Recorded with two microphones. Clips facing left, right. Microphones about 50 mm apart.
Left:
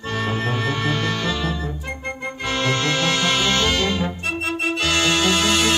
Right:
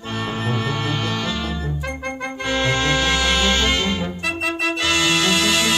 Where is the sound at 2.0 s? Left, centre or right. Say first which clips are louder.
Right 2 dB; right.